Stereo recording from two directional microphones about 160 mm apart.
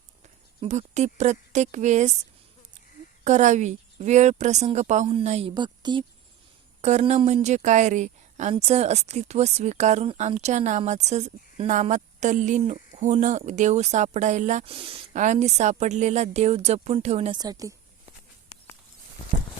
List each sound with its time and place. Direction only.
0.2 s speech: 45° right (ahead or behind)
3.2 s speech: 50° right (ahead or behind); by 6.1 s 30° right (ahead or behind)
7.0 s speech: 40° right (ahead or behind)
14.6 s speech: 35° right (ahead or behind)
15.1 s speech: 50° right (ahead or behind)
17.3 s a woman's voice: 25° right (ahead or behind)